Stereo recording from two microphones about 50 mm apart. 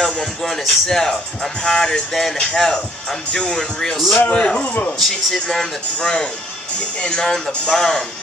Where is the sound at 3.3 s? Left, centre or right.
Centre.